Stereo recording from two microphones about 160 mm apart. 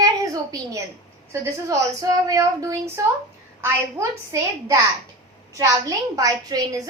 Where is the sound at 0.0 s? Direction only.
20° right (ahead or behind).